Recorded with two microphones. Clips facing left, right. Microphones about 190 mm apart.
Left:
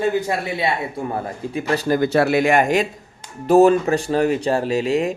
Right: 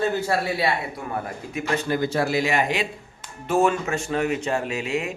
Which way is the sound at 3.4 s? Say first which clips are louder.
Left 8 dB; 35° left (ahead or behind).